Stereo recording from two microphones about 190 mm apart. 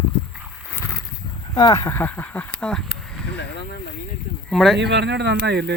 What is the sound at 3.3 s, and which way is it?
Speech, 65° left (ahead or behind).